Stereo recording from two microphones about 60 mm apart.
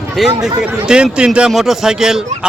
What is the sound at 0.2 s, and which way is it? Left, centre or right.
A man's voice, centre.